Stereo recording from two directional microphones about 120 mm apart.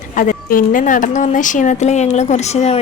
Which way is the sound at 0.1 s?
90° left.